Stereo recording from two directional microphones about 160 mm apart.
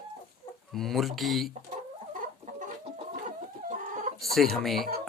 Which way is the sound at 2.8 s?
50° right (ahead or behind).